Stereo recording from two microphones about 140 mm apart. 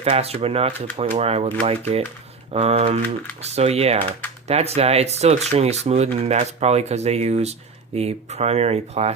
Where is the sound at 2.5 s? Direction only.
45° right (ahead or behind).